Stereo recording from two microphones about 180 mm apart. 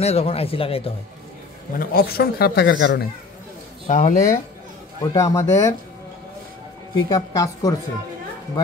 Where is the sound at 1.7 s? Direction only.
60° left (ahead or behind).